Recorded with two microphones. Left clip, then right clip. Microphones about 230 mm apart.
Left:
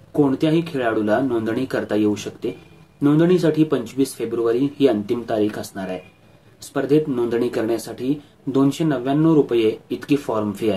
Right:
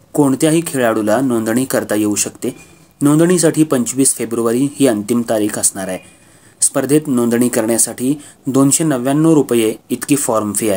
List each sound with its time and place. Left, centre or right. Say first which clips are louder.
0.1 s speech: right 5 dB; right